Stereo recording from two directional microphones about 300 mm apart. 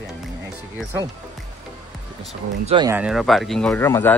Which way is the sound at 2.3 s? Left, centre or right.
Centre.